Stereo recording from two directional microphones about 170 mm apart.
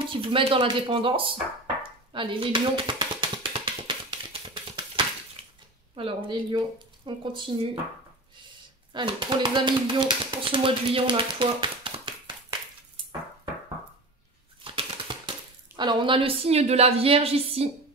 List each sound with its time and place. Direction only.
0.1 s a sound: 30° right (ahead or behind)
5.4 s bathtub: 35° right (ahead or behind)
5.9 s speech: 30° right (ahead or behind)
8.9 s speech: 25° right (ahead or behind)
14.6 s typewriter: 30° right (ahead or behind)